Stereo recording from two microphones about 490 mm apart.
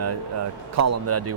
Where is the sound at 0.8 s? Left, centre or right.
Right.